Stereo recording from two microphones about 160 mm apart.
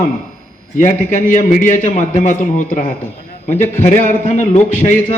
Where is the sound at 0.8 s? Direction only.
50° left (ahead or behind).